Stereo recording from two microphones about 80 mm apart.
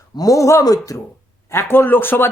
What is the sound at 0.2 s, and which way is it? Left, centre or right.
Speech, left.